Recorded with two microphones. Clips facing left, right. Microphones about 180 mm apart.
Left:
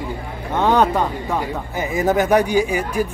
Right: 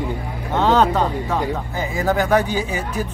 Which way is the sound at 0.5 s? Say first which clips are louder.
Even; 15° left (ahead or behind).